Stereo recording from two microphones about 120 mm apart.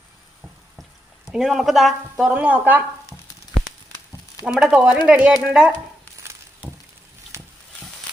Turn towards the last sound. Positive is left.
turn(degrees=-20)  # may be behind; listen again after turning